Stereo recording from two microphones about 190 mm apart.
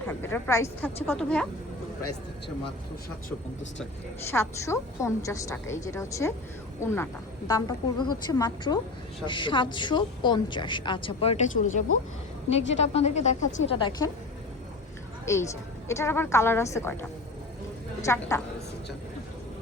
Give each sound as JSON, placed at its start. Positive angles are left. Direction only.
{"t": 0.1, "sound": "a woman's voice", "side_deg": 10}
{"t": 4.3, "sound": "a woman's voice", "side_deg": 15}
{"t": 13.7, "sound": "a woman's voice", "side_deg": 25}
{"t": 15.3, "sound": "a woman's voice", "side_deg": 15}